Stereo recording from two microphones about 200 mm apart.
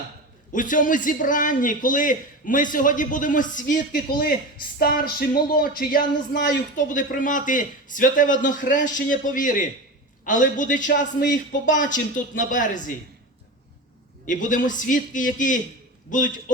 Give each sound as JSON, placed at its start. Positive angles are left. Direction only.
{"t": 0.5, "sound": "a man's voice", "side_deg": 40}
{"t": 14.3, "sound": "a man's voice", "side_deg": 40}